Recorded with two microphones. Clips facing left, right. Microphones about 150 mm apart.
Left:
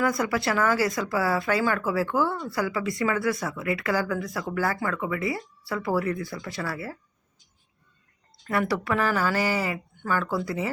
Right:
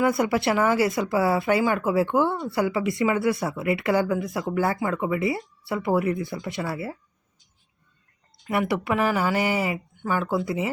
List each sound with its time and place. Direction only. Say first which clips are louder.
0.0 s speech: right 3 dB; 25° right (ahead or behind)
8.4 s speech: right 1 dB; 20° right (ahead or behind)